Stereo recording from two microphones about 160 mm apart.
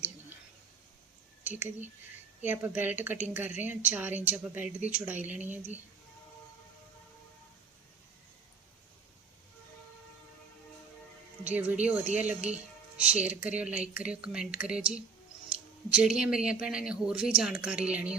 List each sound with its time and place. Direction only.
1.5 s a woman's voice: 10° right (ahead or behind)
11.4 s a woman's voice: 10° right (ahead or behind)